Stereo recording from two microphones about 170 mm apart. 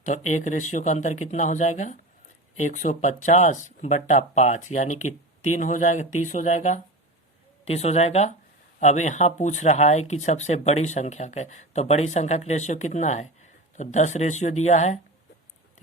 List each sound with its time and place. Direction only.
0.0 s speech: 45° left (ahead or behind)